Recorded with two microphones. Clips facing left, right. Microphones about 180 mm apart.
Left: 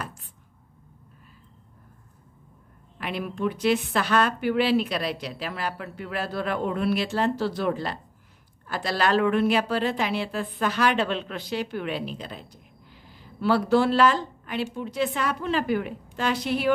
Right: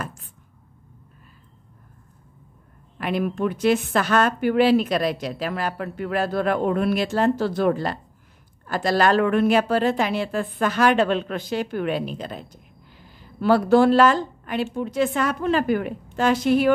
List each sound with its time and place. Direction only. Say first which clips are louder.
3.0 s a woman's voice: right 5 dB; 50° right (ahead or behind)